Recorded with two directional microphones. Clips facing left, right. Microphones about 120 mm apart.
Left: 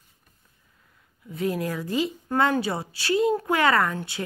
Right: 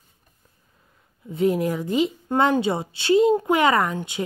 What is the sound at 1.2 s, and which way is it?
Speech, 25° right (ahead or behind).